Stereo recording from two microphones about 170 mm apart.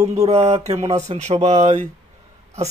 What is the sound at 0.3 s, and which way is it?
Speech, 40° right (ahead or behind).